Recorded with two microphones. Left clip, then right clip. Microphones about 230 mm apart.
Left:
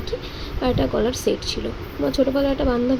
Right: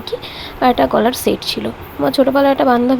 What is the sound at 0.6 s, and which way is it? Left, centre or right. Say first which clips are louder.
A woman's voice: right 9 dB; right.